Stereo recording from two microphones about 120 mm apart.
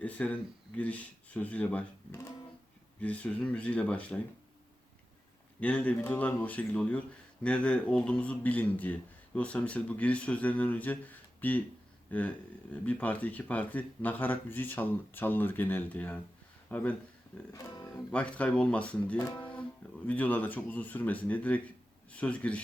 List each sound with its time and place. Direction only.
0.0 s a man's voice: 10° left (ahead or behind)
3.0 s a man's voice: 10° left (ahead or behind)
5.5 s a man's voice: 10° left (ahead or behind)
17.5 s music: 30° left (ahead or behind)
18.1 s a man's voice: 10° left (ahead or behind)
19.2 s music: 40° left (ahead or behind)
20.1 s a man's voice: 15° left (ahead or behind)